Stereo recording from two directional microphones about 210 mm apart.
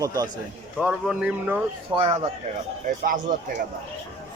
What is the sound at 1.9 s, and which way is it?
Speech, 30° right (ahead or behind).